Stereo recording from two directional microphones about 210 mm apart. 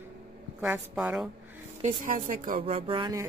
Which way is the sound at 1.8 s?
40° right (ahead or behind).